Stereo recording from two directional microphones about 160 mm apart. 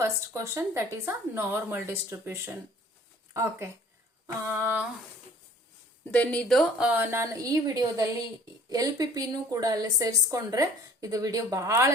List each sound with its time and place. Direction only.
0.0 s speech: 20° right (ahead or behind)
6.1 s a woman's voice: 10° left (ahead or behind); by 11.9 s 20° right (ahead or behind)